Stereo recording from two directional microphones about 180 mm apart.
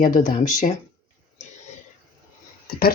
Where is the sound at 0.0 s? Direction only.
45° left (ahead or behind).